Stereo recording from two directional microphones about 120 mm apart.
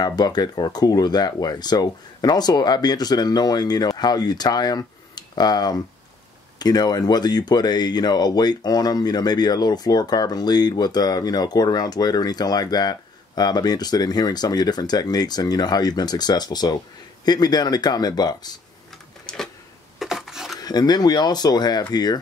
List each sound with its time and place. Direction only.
0.0 s speech: 35° left (ahead or behind)
19.2 s a sound: 5° left (ahead or behind)
20.6 s speech: 35° left (ahead or behind)